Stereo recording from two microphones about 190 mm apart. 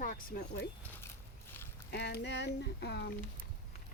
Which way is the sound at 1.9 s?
60° left (ahead or behind).